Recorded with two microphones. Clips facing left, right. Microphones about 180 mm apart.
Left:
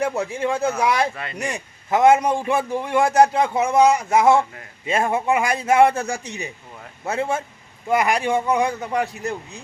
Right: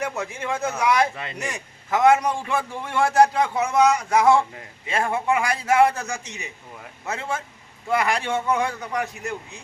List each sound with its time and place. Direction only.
0.0 s a man's voice: 30° left (ahead or behind)